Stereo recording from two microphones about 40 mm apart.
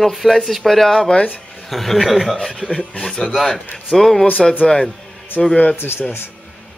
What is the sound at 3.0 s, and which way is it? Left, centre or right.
Speech, centre.